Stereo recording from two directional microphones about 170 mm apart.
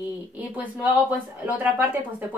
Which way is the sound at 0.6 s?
10° right (ahead or behind).